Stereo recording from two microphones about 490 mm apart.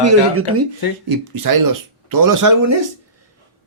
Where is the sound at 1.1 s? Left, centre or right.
Right.